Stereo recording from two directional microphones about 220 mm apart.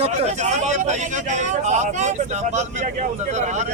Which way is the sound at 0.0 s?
30° right (ahead or behind).